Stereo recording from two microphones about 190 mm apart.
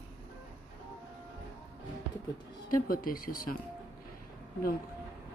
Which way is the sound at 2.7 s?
45° left (ahead or behind).